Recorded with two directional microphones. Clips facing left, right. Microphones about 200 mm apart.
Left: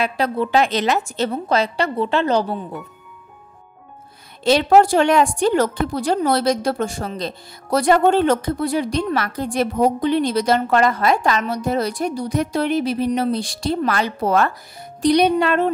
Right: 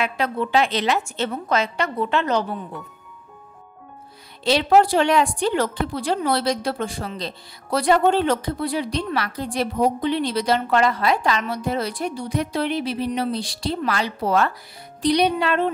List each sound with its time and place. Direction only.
0.0 s a woman's voice: 35° left (ahead or behind)
4.5 s a woman's voice: 45° left (ahead or behind)